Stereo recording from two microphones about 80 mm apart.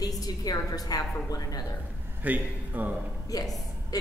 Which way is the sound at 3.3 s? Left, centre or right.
Left.